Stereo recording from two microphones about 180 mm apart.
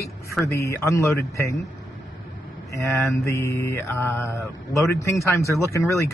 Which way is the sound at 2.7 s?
15° left (ahead or behind).